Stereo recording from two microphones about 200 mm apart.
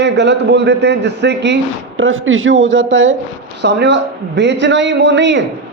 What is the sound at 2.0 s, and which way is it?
A man's voice, 80° right.